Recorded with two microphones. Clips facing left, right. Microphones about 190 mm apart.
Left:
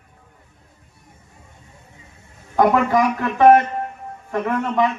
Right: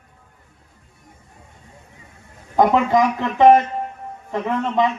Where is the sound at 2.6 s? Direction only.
20° right (ahead or behind).